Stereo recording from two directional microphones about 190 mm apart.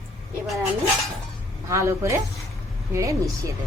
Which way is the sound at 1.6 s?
15° right (ahead or behind).